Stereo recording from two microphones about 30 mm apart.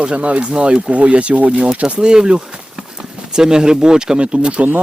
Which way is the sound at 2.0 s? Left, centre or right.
Right.